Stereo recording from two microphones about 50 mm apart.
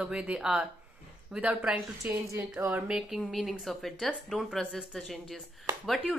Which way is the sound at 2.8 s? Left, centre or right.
Centre.